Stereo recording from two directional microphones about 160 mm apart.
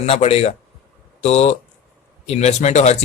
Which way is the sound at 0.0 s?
40° left (ahead or behind).